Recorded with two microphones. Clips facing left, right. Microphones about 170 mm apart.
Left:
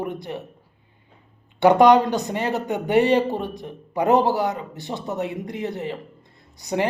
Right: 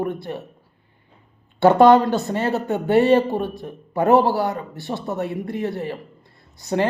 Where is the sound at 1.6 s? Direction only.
15° left (ahead or behind).